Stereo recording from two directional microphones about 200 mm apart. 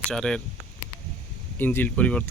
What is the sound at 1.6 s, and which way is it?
Speech, 10° left (ahead or behind).